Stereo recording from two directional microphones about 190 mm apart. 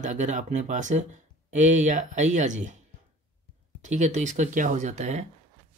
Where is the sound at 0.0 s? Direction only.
40° right (ahead or behind).